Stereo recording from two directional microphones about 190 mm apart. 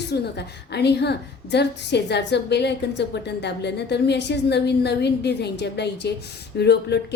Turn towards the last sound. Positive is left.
turn(degrees=60)  # may be behind; listen again after turning